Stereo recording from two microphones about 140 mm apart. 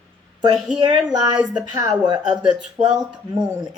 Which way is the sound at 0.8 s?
30° right (ahead or behind).